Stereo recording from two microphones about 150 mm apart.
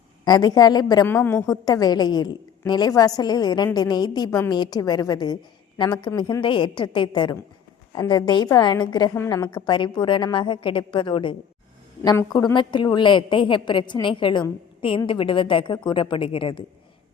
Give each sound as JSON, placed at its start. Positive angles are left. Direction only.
{"t": 0.3, "sound": "a woman's voice", "side_deg": 25}
{"t": 1.0, "sound": "a woman's voice", "side_deg": 15}
{"t": 9.1, "sound": "a woman's voice", "side_deg": 15}
{"t": 9.4, "sound": "a woman's voice", "side_deg": 30}